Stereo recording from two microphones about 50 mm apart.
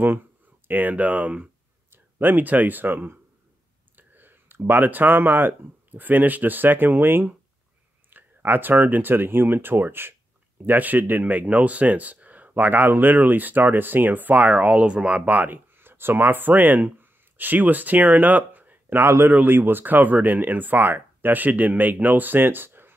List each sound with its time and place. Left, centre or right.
0.7 s speech: right
1.9 s speech: right
18.9 s a man's voice: right
19.3 s speech: right